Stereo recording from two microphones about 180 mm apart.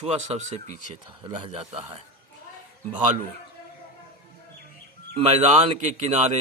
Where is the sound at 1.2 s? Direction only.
30° right (ahead or behind).